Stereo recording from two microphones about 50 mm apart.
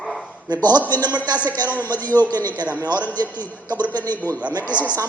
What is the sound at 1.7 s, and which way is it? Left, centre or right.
A man's voice, left.